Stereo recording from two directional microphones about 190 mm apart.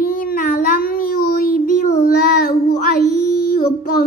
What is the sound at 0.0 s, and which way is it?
Child singing, 50° left (ahead or behind).